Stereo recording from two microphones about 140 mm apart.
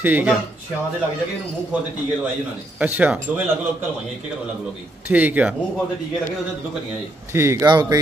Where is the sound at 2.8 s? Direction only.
10° right (ahead or behind).